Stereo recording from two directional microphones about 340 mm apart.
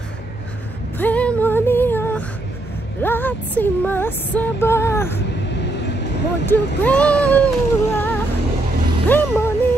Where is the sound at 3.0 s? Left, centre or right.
Centre.